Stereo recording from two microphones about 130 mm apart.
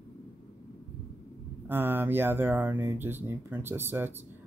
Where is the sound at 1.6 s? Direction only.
15° right (ahead or behind).